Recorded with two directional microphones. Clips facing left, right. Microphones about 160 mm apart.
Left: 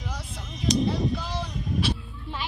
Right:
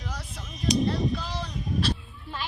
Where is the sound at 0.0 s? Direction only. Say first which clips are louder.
Left 1 dB; 10° left (ahead or behind).